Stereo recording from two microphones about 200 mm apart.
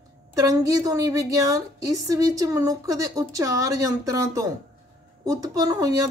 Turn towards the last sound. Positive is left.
turn(degrees=-20)  # may be behind; listen again after turning